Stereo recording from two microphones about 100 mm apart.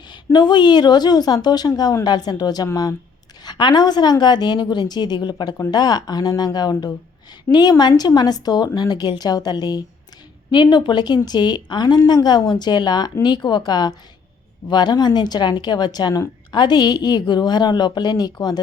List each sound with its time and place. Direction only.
0.3 s a woman's voice: 45° left (ahead or behind)